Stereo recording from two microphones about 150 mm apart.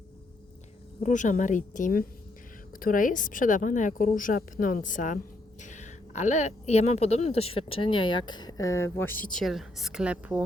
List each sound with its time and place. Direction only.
1.0 s a woman's voice: 55° left (ahead or behind); by 10.4 s 10° right (ahead or behind)